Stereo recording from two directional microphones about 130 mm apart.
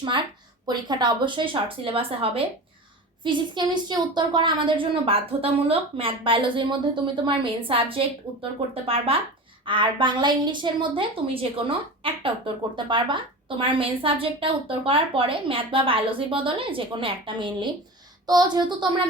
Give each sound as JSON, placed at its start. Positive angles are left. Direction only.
{"t": 0.0, "sound": "a woman's voice", "side_deg": -35}